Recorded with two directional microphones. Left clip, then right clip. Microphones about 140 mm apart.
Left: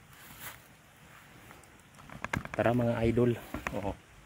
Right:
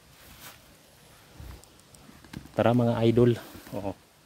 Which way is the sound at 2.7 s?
90° right.